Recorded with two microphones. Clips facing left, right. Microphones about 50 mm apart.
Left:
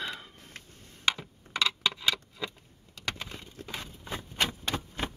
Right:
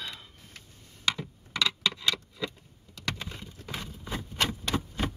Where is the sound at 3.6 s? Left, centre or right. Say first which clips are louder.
Right 2 dB; centre.